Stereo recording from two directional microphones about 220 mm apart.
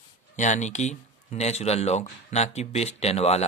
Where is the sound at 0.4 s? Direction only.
30° left (ahead or behind).